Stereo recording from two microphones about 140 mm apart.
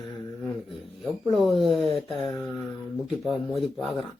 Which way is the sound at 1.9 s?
40° left (ahead or behind).